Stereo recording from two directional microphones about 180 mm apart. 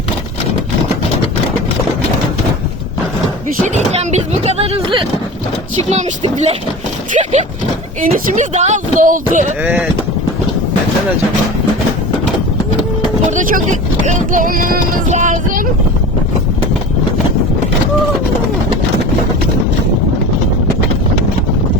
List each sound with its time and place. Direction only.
3.9 s vehicle: 35° right (ahead or behind)
5.9 s speech: 35° right (ahead or behind)
13.3 s speech: 45° right (ahead or behind)